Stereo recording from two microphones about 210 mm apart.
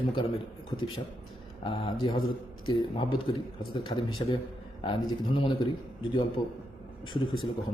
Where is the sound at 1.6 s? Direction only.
20° left (ahead or behind).